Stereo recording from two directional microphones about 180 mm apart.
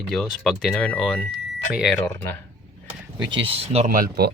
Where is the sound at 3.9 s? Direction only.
55° right (ahead or behind).